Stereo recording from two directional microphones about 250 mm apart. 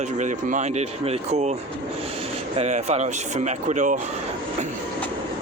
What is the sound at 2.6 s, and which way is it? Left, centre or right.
Speech, right.